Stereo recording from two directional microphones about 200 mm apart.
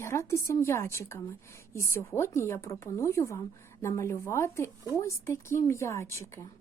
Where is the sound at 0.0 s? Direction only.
15° left (ahead or behind).